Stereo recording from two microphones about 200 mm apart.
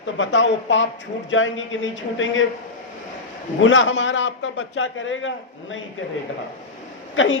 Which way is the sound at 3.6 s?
70° left (ahead or behind).